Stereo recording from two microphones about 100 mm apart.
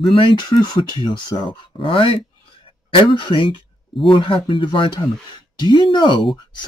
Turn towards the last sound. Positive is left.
turn(degrees=50)  # may be behind; listen again after turning